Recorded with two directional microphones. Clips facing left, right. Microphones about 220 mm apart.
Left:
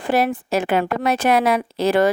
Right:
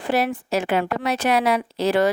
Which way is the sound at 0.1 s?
50° left (ahead or behind).